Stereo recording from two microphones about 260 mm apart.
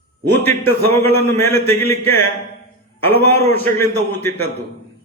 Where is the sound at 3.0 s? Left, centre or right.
Centre.